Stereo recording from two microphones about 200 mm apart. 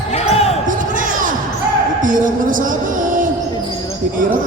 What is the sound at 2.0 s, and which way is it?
Music, 40° right (ahead or behind).